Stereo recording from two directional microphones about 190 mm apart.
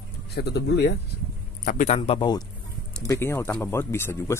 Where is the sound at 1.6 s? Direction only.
45° left (ahead or behind).